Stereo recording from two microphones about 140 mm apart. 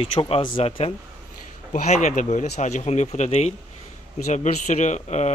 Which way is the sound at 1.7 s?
60° left (ahead or behind).